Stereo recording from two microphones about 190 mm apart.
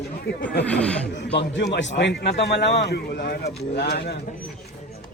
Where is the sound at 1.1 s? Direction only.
65° left (ahead or behind).